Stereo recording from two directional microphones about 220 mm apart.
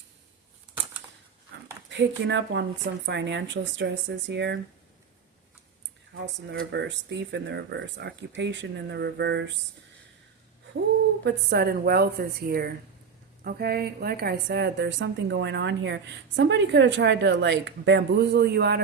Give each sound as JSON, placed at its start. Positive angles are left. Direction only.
{"t": 1.9, "sound": "a woman's voice", "side_deg": -55}
{"t": 6.1, "sound": "a woman's voice", "side_deg": -55}
{"t": 11.2, "sound": "a woman's voice", "side_deg": -50}